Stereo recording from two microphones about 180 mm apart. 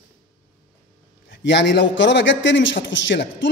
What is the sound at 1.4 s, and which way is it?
A man's voice, 75° left (ahead or behind).